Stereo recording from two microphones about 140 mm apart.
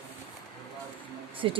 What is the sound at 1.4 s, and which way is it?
Speech, 35° right (ahead or behind).